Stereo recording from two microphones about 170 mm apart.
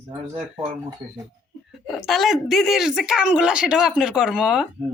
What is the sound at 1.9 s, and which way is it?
Speech, centre (ahead or behind).